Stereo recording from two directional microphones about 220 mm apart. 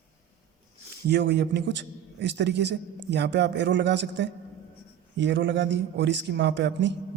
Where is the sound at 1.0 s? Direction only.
50° right (ahead or behind).